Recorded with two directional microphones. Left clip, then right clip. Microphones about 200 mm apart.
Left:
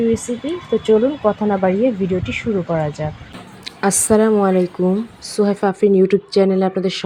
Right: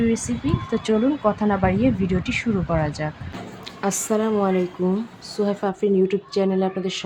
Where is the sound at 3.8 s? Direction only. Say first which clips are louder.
Left 8 dB; 25° left (ahead or behind).